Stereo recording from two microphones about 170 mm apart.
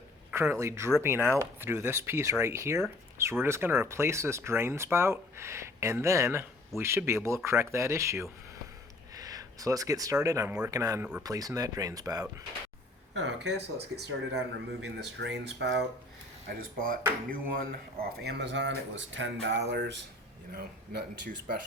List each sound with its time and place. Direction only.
0.3 s speech: 15° right (ahead or behind)
9.1 s a sound: 20° right (ahead or behind)
10.2 s speech: 20° right (ahead or behind)
13.2 s speech: 85° right
14.9 s speech: 90° right
16.5 s speech: 55° right (ahead or behind); by 20.0 s 80° right
20.5 s speech: 65° right (ahead or behind)